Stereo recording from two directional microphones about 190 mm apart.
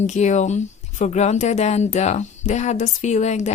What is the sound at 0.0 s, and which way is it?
A woman's voice, 40° left (ahead or behind).